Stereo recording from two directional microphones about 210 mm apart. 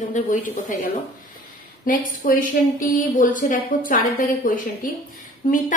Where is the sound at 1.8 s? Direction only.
40° left (ahead or behind).